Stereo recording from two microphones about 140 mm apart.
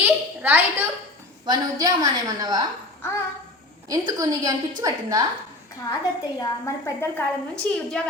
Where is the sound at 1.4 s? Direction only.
30° right (ahead or behind).